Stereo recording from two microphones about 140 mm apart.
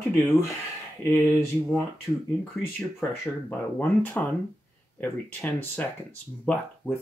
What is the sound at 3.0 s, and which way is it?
Speech, 10° left (ahead or behind).